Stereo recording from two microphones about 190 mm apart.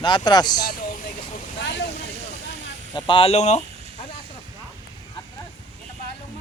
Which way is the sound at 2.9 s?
25° left (ahead or behind).